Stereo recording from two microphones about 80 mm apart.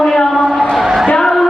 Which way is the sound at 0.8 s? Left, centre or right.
Centre.